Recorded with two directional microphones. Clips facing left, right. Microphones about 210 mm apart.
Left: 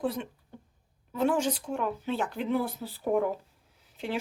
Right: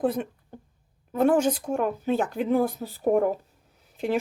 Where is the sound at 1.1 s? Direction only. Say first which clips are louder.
Right 6 dB; 50° right (ahead or behind).